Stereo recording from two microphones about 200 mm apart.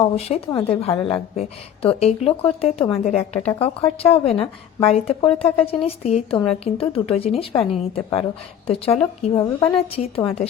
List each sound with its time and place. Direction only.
0.0 s a woman's voice: 30° left (ahead or behind)